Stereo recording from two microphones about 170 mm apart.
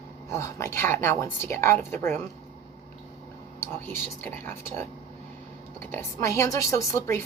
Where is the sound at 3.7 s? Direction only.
15° left (ahead or behind).